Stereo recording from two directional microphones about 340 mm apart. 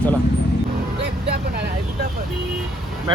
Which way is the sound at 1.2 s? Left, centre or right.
Right.